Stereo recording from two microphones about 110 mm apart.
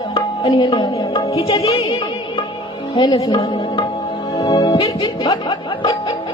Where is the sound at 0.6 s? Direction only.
55° left (ahead or behind).